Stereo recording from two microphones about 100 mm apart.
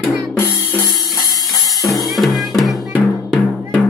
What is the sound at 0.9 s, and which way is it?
Music, 40° left (ahead or behind).